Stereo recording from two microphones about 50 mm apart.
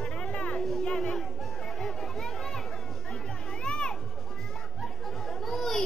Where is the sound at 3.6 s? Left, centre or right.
Centre.